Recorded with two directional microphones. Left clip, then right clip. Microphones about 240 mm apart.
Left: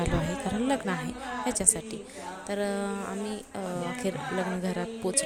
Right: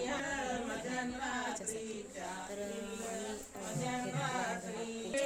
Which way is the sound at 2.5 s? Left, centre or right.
Left.